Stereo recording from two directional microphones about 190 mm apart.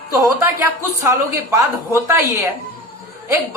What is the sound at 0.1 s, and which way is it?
Speech, 15° right (ahead or behind).